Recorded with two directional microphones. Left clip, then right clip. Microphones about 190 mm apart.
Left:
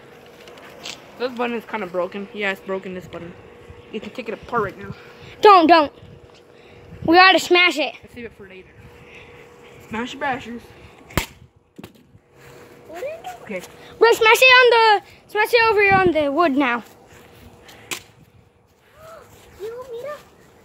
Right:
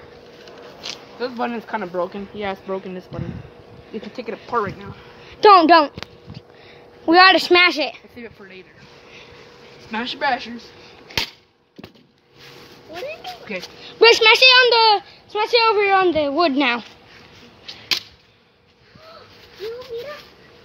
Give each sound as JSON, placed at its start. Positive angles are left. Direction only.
{"t": 0.7, "sound": "a sound", "side_deg": 0}
{"t": 1.4, "sound": "speech", "side_deg": -25}
{"t": 2.1, "sound": "a woman's voice", "side_deg": -5}
{"t": 5.2, "sound": "a sound", "side_deg": 10}
{"t": 7.1, "sound": "speech", "side_deg": 5}
{"t": 8.2, "sound": "a woman's voice", "side_deg": -5}
{"t": 9.8, "sound": "speech", "side_deg": -20}
{"t": 13.5, "sound": "speech", "side_deg": 5}
{"t": 14.2, "sound": "a woman's voice", "side_deg": 20}